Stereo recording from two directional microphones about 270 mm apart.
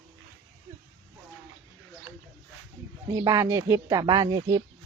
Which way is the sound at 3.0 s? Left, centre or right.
Centre.